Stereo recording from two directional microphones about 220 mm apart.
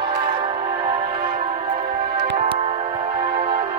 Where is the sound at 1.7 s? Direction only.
45° right (ahead or behind).